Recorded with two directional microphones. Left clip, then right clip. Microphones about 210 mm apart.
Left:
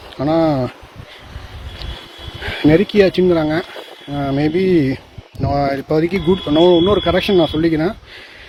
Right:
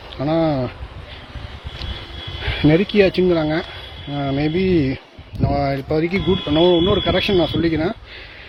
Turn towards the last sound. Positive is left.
turn(degrees=25)  # may be behind; listen again after turning